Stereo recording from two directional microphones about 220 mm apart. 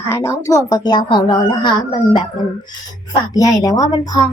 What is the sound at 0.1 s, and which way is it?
Speech, 15° left (ahead or behind).